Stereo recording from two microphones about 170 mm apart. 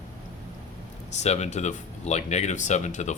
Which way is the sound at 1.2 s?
40° left (ahead or behind).